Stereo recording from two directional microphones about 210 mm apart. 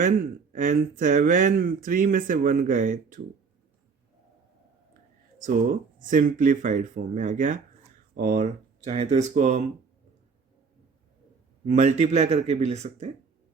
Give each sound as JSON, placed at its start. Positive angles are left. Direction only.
{"t": 0.0, "sound": "speech", "side_deg": -40}
{"t": 5.4, "sound": "speech", "side_deg": -40}
{"t": 11.6, "sound": "speech", "side_deg": -35}